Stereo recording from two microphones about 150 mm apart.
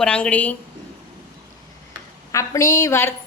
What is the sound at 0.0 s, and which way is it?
Speech, 10° left (ahead or behind).